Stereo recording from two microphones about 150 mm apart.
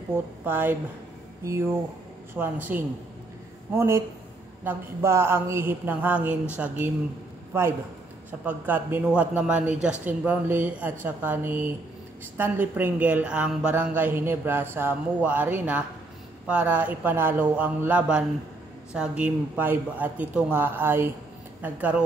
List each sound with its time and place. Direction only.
0.5 s a woman's voice: 15° right (ahead or behind)
2.3 s a woman's voice: 10° right (ahead or behind)
8.5 s a woman's voice: 10° right (ahead or behind)